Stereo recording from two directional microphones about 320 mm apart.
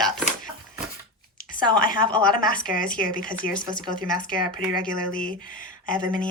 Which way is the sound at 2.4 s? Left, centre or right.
Left.